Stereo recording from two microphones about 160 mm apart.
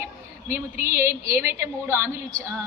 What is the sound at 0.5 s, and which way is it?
A woman's voice, 15° right (ahead or behind).